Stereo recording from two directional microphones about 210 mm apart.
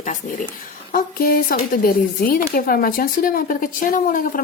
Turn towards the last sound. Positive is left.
turn(degrees=40)  # may be behind; listen again after turning